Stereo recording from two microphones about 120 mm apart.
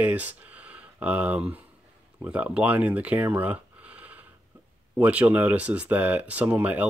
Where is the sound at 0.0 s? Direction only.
15° right (ahead or behind).